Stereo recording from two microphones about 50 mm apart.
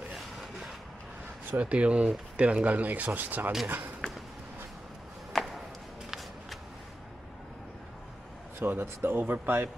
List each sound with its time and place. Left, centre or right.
1.6 s a man's voice: right
5.3 s a sound: centre
6.0 s shuffling cards: centre
8.5 s a man's voice: right